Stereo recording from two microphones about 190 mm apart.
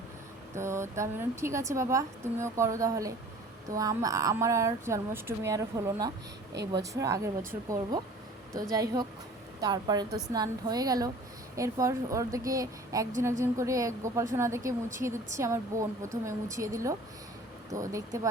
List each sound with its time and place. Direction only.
0.5 s a woman's voice: 15° right (ahead or behind)
6.5 s speech: 65° right (ahead or behind)
6.9 s a woman's voice: 15° right (ahead or behind)